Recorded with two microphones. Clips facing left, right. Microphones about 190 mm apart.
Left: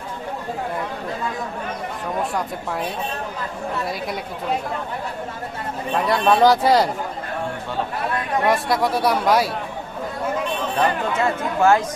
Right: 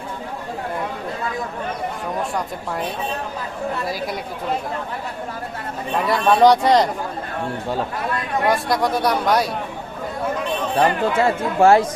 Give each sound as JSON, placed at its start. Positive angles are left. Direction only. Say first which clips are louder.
{"t": 3.8, "sound": "speech", "louder": "right 1 dB", "side_deg": 0}
{"t": 6.2, "sound": "speech", "louder": "right 2 dB", "side_deg": 0}
{"t": 8.4, "sound": "speech", "louder": "right 1 dB", "side_deg": 0}
{"t": 10.8, "sound": "speech", "louder": "right 4 dB", "side_deg": -30}